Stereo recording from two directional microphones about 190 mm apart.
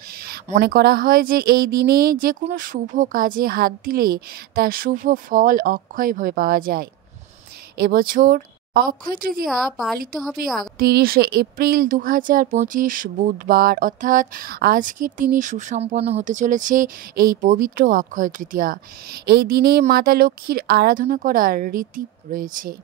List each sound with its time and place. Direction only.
0.1 s a sound: 55° right (ahead or behind)
0.6 s speech: 55° right (ahead or behind)
9.5 s a woman's voice: centre (ahead or behind)
10.4 s speech: 50° right (ahead or behind)